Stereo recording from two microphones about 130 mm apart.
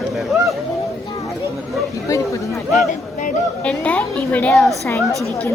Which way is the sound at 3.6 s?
10° left (ahead or behind).